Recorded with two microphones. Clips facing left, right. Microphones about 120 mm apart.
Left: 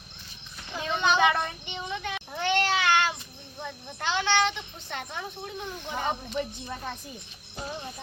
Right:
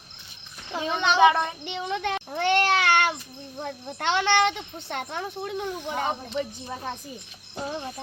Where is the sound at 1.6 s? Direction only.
65° right (ahead or behind).